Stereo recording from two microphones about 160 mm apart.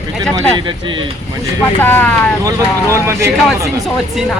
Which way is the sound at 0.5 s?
30° right (ahead or behind).